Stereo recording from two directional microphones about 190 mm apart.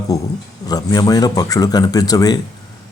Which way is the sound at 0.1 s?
20° left (ahead or behind).